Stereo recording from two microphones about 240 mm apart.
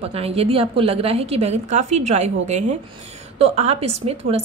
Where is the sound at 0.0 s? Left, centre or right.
Right.